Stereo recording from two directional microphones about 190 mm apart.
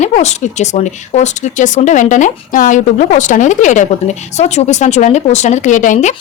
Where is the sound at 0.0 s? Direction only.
35° left (ahead or behind).